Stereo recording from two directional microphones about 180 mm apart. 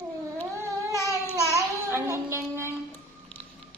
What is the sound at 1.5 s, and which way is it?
Music, 15° right (ahead or behind).